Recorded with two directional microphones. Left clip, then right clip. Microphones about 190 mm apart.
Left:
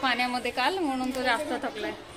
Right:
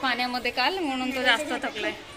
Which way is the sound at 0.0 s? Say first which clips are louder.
Even; centre (ahead or behind).